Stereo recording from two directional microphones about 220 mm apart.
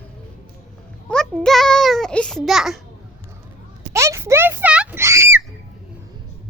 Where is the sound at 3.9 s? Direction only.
15° right (ahead or behind).